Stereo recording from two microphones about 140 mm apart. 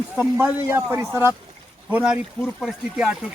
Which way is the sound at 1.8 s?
5° right (ahead or behind).